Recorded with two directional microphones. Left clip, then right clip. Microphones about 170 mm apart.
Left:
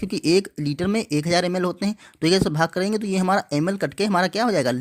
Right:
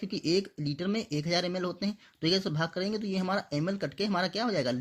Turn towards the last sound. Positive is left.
turn(degrees=40)  # may be behind; listen again after turning